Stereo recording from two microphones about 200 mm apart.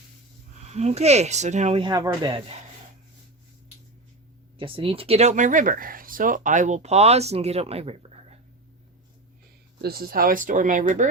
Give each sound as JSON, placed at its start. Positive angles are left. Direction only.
{"t": 0.6, "sound": "speech", "side_deg": -35}
{"t": 1.9, "sound": "speech", "side_deg": -20}
{"t": 4.5, "sound": "speech", "side_deg": -25}
{"t": 9.8, "sound": "speech", "side_deg": -50}